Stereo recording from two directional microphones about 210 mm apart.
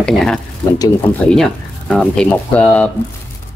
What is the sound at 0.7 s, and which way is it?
Speech, 15° left (ahead or behind).